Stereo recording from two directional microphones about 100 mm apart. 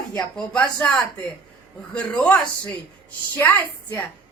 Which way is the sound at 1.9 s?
10° left (ahead or behind).